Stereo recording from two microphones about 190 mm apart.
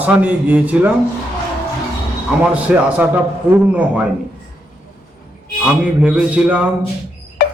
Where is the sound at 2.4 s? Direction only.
5° right (ahead or behind).